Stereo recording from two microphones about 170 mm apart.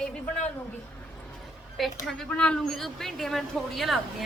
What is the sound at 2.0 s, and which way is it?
A woman's voice, 5° left (ahead or behind).